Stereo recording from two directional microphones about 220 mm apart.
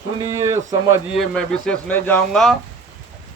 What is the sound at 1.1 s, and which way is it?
Speech, centre (ahead or behind).